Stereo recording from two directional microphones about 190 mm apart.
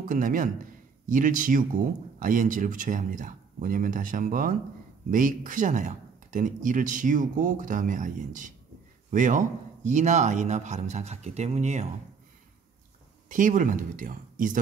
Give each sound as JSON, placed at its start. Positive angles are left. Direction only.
{"t": 0.0, "sound": "speech", "side_deg": -45}
{"t": 13.3, "sound": "speech", "side_deg": -45}